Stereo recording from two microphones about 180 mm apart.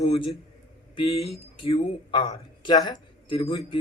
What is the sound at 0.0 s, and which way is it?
A man's voice, 35° left (ahead or behind).